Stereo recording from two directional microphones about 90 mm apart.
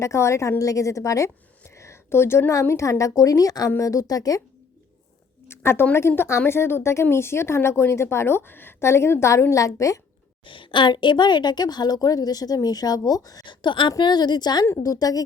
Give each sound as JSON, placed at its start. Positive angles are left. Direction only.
{"t": 0.0, "sound": "a woman's voice", "side_deg": 35}
{"t": 5.5, "sound": "speech", "side_deg": 25}
{"t": 10.4, "sound": "a woman's voice", "side_deg": 70}
{"t": 13.4, "sound": "a woman's voice", "side_deg": 60}